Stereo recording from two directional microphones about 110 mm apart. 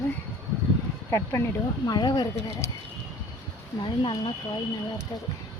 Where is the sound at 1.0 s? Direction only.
25° left (ahead or behind).